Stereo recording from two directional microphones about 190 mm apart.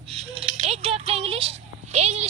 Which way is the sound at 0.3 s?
35° right (ahead or behind).